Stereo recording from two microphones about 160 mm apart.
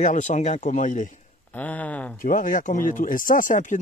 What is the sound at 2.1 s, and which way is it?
Speech, 55° left (ahead or behind).